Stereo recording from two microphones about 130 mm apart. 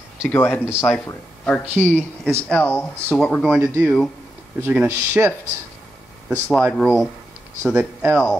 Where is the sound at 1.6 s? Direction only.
15° right (ahead or behind).